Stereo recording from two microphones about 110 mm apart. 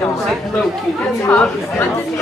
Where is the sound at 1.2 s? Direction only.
20° left (ahead or behind).